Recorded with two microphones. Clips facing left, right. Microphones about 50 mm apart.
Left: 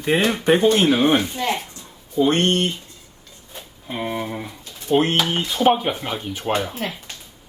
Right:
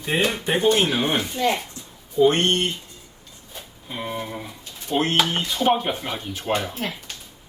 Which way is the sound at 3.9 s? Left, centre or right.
Left.